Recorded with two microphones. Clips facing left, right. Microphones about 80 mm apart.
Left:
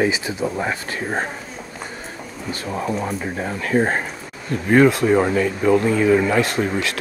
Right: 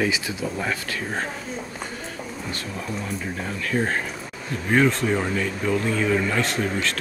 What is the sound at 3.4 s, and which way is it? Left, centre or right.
Speech, left.